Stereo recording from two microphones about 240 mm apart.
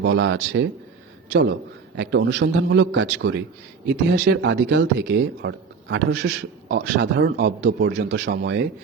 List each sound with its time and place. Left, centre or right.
0.0 s speech: right